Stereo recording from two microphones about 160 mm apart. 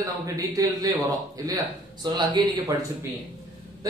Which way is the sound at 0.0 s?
20° right (ahead or behind).